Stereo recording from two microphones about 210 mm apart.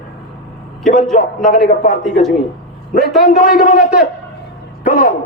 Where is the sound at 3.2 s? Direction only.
40° left (ahead or behind).